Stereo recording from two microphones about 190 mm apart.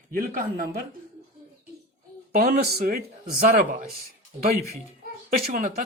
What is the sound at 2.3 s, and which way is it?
Speech, 50° right (ahead or behind).